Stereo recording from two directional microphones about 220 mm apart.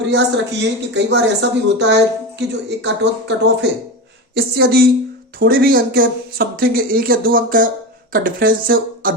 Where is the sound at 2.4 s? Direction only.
50° right (ahead or behind).